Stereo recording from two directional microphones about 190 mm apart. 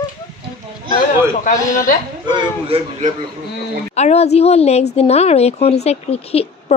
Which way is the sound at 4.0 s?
35° left (ahead or behind).